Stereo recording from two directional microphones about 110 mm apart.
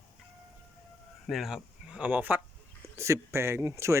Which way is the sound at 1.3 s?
5° right (ahead or behind).